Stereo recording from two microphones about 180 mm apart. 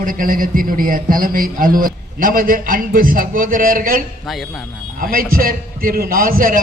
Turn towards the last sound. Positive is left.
turn(degrees=-50)  # may be behind; listen again after turning